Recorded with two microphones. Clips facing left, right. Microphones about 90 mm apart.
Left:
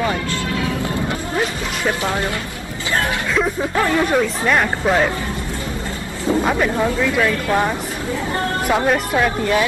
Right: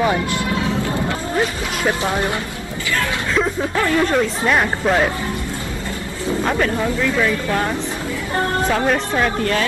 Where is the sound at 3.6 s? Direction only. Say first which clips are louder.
Even; 15° left (ahead or behind).